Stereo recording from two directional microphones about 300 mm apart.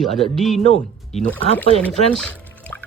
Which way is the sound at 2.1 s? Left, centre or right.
Centre.